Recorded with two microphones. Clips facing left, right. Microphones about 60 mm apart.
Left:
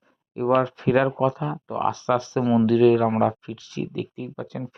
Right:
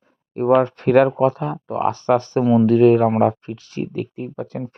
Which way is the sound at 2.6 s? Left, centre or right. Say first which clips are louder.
Right 3 dB; right.